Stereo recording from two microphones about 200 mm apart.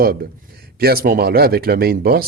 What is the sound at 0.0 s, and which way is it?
Speech, 50° right (ahead or behind).